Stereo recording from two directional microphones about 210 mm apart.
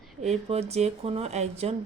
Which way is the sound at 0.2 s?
30° right (ahead or behind).